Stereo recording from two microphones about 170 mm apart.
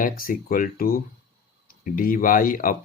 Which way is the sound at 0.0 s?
55° left (ahead or behind).